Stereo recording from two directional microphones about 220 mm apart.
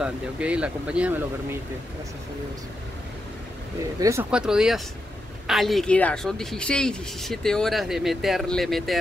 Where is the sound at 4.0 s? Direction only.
10° right (ahead or behind).